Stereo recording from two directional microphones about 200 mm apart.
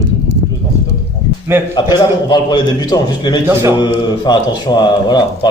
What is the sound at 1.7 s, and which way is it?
Speech, 20° left (ahead or behind).